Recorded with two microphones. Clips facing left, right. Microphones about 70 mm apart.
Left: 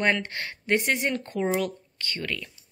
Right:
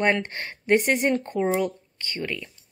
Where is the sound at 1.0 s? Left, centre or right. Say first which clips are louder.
Right 4 dB; right.